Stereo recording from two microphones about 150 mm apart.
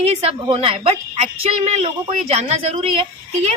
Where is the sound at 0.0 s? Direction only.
45° right (ahead or behind).